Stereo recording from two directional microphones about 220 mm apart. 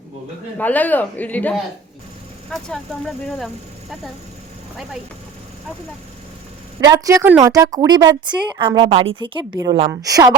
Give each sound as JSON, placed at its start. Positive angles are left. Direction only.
{"t": 0.6, "sound": "speech", "side_deg": 5}
{"t": 6.8, "sound": "a woman's voice", "side_deg": -15}